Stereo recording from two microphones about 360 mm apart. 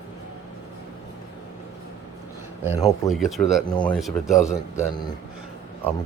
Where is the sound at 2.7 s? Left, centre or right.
Centre.